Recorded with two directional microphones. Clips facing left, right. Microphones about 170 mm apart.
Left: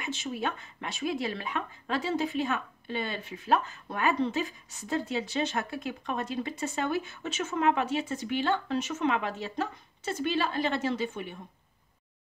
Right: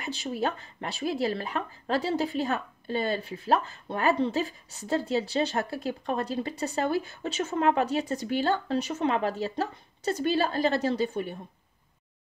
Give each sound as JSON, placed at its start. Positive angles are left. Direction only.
{"t": 0.0, "sound": "speech", "side_deg": -35}